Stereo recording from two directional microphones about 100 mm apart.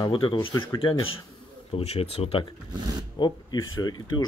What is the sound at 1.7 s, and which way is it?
Speech, 85° left.